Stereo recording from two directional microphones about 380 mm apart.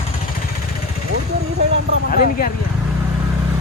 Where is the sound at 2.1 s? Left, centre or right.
Left.